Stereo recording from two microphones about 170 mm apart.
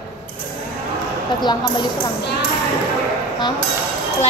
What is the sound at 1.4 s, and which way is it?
Speech, 25° left (ahead or behind).